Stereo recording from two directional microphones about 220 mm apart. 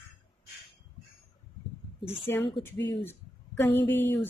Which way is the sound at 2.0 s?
25° left (ahead or behind).